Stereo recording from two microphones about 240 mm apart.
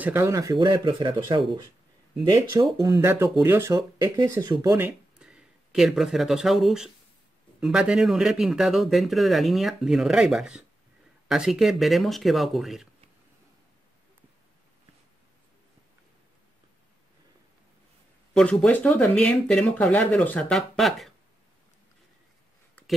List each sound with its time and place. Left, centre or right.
0.0 s speech: centre
2.5 s speech: centre
18.3 s speech: centre